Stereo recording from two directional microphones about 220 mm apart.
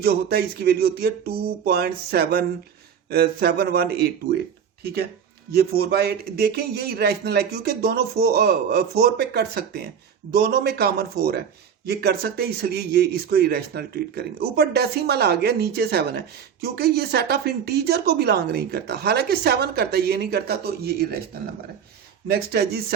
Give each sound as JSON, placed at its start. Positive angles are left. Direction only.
{"t": 0.0, "sound": "speech", "side_deg": -45}
{"t": 22.3, "sound": "speech", "side_deg": -45}